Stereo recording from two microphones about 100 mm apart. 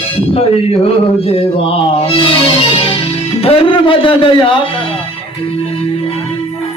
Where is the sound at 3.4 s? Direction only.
65° left (ahead or behind).